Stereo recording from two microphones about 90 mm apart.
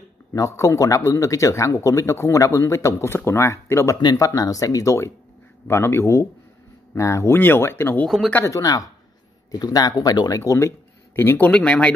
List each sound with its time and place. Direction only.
0.3 s speech: 35° left (ahead or behind)
8.5 s speech: 40° left (ahead or behind)
11.1 s speech: 20° left (ahead or behind)